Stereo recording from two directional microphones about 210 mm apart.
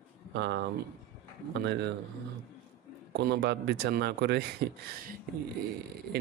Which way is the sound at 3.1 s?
55° right (ahead or behind).